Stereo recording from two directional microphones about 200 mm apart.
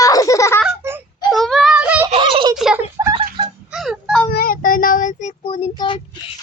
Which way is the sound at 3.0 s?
15° right (ahead or behind).